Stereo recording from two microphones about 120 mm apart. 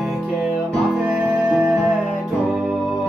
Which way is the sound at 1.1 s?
15° right (ahead or behind).